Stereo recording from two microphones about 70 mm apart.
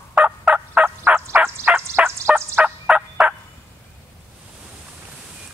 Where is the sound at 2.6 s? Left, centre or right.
Centre.